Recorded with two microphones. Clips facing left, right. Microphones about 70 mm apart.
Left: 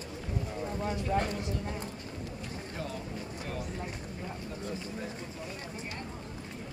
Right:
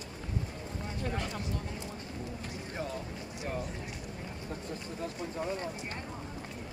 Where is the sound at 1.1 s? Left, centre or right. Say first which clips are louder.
Left 7 dB; left.